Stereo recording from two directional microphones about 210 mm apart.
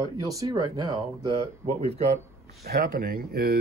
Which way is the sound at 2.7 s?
45° right (ahead or behind).